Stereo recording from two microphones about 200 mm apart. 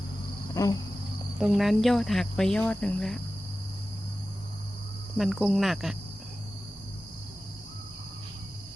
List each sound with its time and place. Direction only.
0.5 s cricket: 15° left (ahead or behind)
1.4 s speech: centre (ahead or behind)
5.1 s speech: centre (ahead or behind)